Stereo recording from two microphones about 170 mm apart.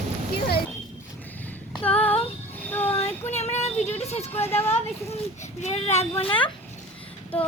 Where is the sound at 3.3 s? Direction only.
40° left (ahead or behind).